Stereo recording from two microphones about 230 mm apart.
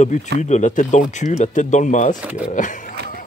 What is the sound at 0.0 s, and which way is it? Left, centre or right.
Speech, left.